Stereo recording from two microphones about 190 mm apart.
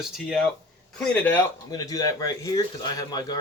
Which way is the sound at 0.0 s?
Centre (ahead or behind).